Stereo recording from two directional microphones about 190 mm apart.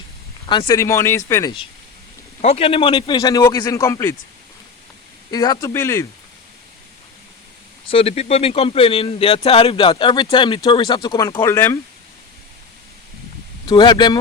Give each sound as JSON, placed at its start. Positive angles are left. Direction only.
{"t": 0.4, "sound": "speech", "side_deg": 25}
{"t": 2.4, "sound": "speech", "side_deg": 30}
{"t": 5.3, "sound": "speech", "side_deg": 20}
{"t": 7.9, "sound": "speech", "side_deg": 30}
{"t": 13.7, "sound": "speech", "side_deg": 20}